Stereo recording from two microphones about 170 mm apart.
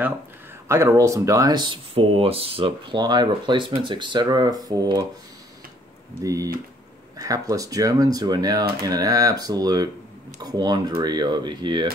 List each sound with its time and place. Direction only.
0.7 s speech: 15° right (ahead or behind)
6.2 s speech: 20° right (ahead or behind)